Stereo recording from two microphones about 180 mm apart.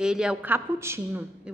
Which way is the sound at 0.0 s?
5° right (ahead or behind).